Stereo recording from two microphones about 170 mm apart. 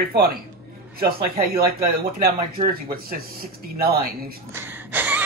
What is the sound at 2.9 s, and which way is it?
Speech, 60° right (ahead or behind).